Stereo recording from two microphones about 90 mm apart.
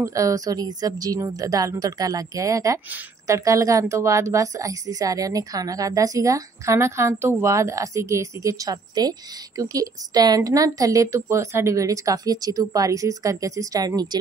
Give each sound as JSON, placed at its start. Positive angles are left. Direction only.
{"t": 0.0, "sound": "a woman's voice", "side_deg": -40}